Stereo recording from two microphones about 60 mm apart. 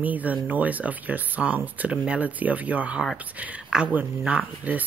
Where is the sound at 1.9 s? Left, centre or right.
Centre.